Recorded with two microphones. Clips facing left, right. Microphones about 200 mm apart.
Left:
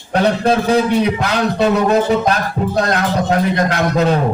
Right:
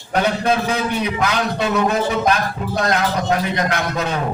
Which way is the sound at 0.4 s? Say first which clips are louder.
Left 5 dB; 35° left (ahead or behind).